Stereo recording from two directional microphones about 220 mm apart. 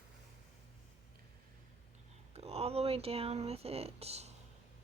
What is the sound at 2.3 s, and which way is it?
Speech, 30° right (ahead or behind).